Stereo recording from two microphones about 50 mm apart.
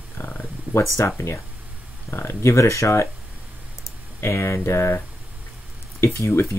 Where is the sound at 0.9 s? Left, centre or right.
Left.